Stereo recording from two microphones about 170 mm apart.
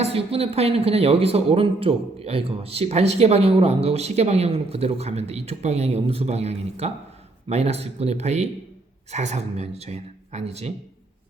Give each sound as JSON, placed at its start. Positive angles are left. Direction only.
{"t": 0.0, "sound": "speech", "side_deg": -35}